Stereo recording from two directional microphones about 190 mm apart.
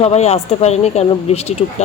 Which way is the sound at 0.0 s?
35° left (ahead or behind).